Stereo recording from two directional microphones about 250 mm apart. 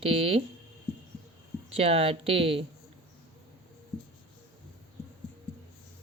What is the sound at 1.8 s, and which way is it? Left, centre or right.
Speech, right.